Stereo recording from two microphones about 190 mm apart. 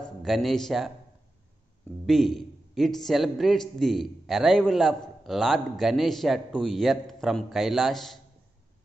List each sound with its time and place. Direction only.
0.0 s speech: centre (ahead or behind)
2.0 s a man's voice: centre (ahead or behind)